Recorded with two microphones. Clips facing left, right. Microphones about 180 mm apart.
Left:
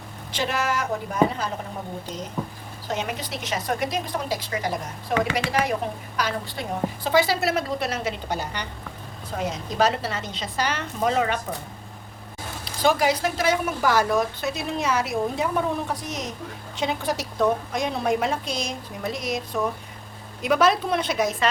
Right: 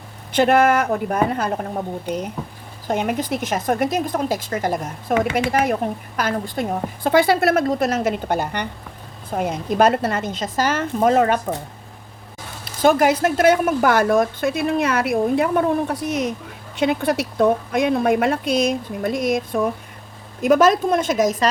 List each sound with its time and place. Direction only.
0.3 s speech: 55° right (ahead or behind)
12.8 s speech: 50° right (ahead or behind)